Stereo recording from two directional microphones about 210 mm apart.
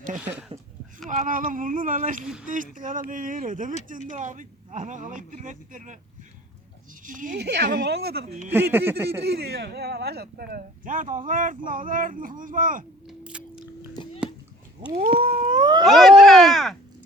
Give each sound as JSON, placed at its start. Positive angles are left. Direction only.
{"t": 0.2, "sound": "speech", "side_deg": -5}
{"t": 1.0, "sound": "speech", "side_deg": -35}
{"t": 7.0, "sound": "speech", "side_deg": -40}
{"t": 8.5, "sound": "speech", "side_deg": -10}
{"t": 9.3, "sound": "speech", "side_deg": -50}
{"t": 13.1, "sound": "chewing", "side_deg": -5}
{"t": 14.0, "sound": "a sound", "side_deg": 20}
{"t": 15.1, "sound": "a sound", "side_deg": -25}
{"t": 15.9, "sound": "a sound", "side_deg": 0}